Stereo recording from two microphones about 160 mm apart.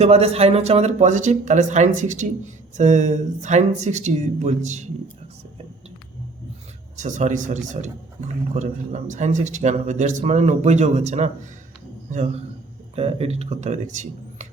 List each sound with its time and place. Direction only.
0.0 s speech: 40° right (ahead or behind)
6.9 s speech: 50° right (ahead or behind)
13.0 s speech: 40° right (ahead or behind)